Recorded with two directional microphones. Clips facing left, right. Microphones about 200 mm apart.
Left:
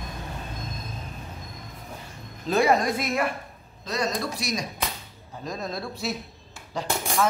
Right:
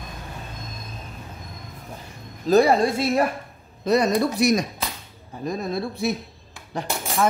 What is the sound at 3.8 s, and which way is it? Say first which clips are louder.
Speech: right 9 dB; 60° right (ahead or behind).